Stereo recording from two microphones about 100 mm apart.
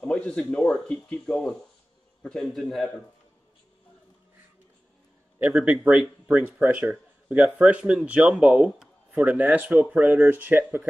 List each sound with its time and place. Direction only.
0.0 s a man's voice: 10° left (ahead or behind)
5.5 s speech: 5° right (ahead or behind)